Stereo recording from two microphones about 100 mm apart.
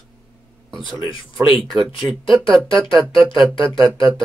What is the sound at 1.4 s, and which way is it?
Speech, 5° right (ahead or behind).